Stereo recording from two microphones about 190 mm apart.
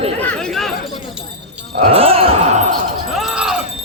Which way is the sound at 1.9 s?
30° right (ahead or behind).